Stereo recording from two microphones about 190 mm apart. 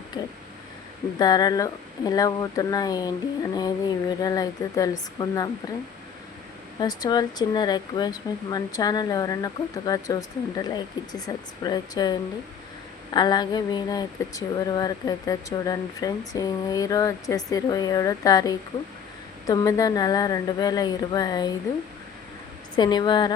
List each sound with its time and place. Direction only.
1.2 s speech: 20° left (ahead or behind)
6.7 s speech: 20° left (ahead or behind)
13.1 s speech: 20° left (ahead or behind)
22.7 s speech: 25° left (ahead or behind)